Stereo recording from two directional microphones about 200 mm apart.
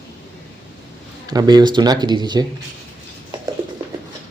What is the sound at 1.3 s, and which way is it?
Speech, 20° right (ahead or behind).